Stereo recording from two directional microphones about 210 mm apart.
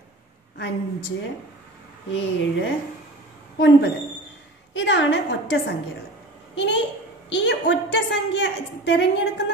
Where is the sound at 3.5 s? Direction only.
55° left (ahead or behind).